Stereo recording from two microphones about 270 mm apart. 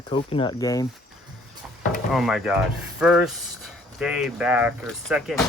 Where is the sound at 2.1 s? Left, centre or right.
Centre.